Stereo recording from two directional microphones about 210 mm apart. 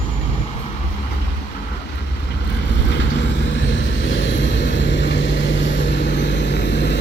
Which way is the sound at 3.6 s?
60° left (ahead or behind).